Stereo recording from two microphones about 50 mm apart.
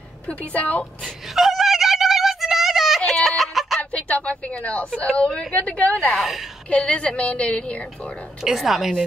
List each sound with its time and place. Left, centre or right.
0.3 s a woman's voice: left
1.2 s a sound: centre
3.1 s fowl: centre
3.9 s a sound: left
5.1 s a woman's voice: left
6.1 s a woman's voice: centre
6.9 s a woman's voice: left
8.4 s a woman's voice: centre